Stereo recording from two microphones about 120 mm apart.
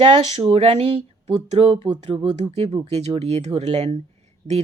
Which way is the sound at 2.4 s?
60° right (ahead or behind).